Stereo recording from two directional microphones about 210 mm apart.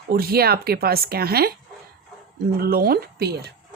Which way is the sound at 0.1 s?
45° right (ahead or behind).